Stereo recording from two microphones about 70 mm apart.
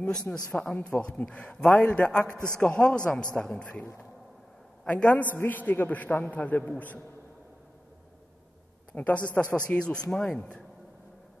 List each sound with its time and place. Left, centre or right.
0.1 s a man's voice: centre
2.2 s a man's voice: right
2.5 s speech: centre
4.8 s a man's voice: left
8.9 s a man's voice: left